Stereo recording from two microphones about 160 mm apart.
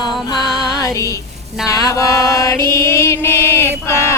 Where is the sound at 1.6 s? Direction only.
20° left (ahead or behind).